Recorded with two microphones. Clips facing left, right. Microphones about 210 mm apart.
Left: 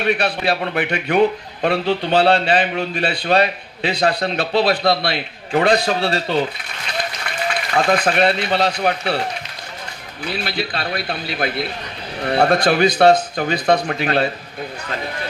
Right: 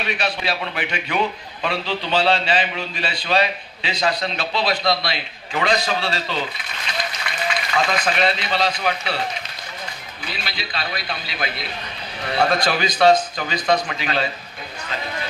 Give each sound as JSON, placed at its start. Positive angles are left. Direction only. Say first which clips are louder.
{"t": 0.0, "sound": "a man's voice", "louder": "left 6 dB", "side_deg": 55}
{"t": 10.2, "sound": "a man's voice", "louder": "left 9 dB", "side_deg": 55}